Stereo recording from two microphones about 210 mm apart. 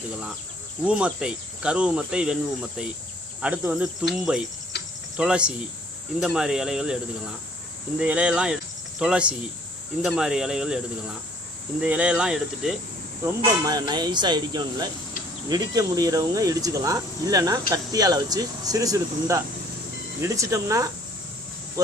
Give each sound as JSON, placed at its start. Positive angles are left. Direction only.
{"t": 0.9, "sound": "speech", "side_deg": -5}
{"t": 4.7, "sound": "cricket", "side_deg": 55}
{"t": 5.1, "sound": "speech", "side_deg": -5}
{"t": 11.8, "sound": "speech", "side_deg": -5}
{"t": 13.4, "sound": "speech", "side_deg": -20}